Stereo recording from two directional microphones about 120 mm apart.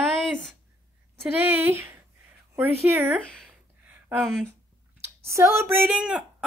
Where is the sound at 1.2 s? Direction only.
15° right (ahead or behind).